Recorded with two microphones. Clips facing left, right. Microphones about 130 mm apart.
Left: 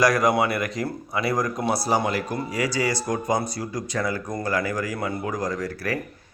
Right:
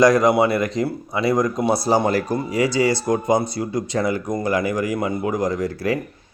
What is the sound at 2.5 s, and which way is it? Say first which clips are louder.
Speech: right 6 dB; 25° right (ahead or behind).